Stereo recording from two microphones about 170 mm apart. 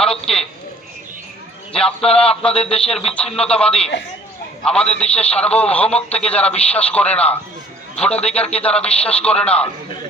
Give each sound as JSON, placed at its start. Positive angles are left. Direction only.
{"t": 0.0, "sound": "a sound", "side_deg": 5}
{"t": 1.7, "sound": "a man's voice", "side_deg": 5}
{"t": 2.0, "sound": "speech", "side_deg": 35}
{"t": 2.4, "sound": "a man's voice", "side_deg": 5}